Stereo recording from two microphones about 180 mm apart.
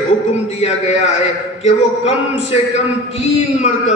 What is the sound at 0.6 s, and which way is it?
A man's voice, 35° left (ahead or behind).